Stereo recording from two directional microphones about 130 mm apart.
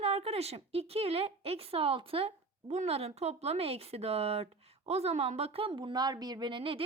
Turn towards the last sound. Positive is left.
turn(degrees=-40)  # may be behind; listen again after turning